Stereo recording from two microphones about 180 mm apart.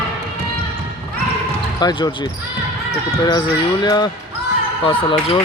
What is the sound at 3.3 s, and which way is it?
Speech, 25° left (ahead or behind).